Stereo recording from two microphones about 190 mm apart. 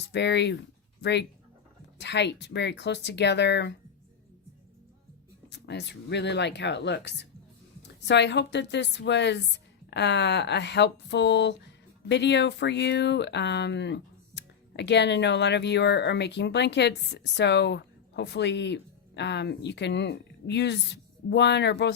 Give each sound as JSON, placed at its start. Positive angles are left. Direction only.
{"t": 0.1, "sound": "speech", "side_deg": 65}
{"t": 5.5, "sound": "a woman's voice", "side_deg": 65}